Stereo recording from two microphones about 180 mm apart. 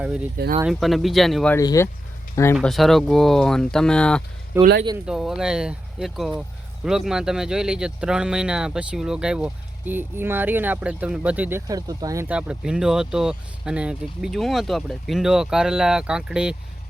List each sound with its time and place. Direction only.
0.6 s speech: centre (ahead or behind)
1.5 s speech: 15° left (ahead or behind)
2.6 s speech: centre (ahead or behind)
4.5 s speech: 10° right (ahead or behind)